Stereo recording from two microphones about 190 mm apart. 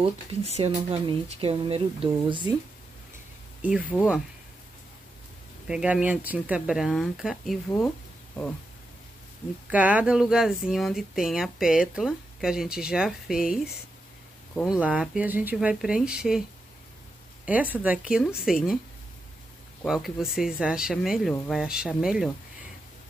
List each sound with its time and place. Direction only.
0.0 s speech: 30° right (ahead or behind)
3.6 s speech: 5° right (ahead or behind)
5.7 s speech: 5° right (ahead or behind)
9.7 s speech: 10° right (ahead or behind)
17.5 s speech: 5° right (ahead or behind)
19.8 s speech: centre (ahead or behind)